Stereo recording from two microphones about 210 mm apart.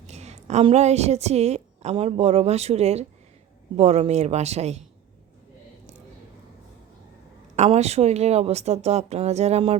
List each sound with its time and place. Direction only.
0.1 s a woman's voice: 30° right (ahead or behind)
7.5 s a woman's voice: 30° right (ahead or behind)